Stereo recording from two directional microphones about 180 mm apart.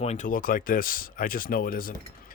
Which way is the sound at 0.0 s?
40° left (ahead or behind).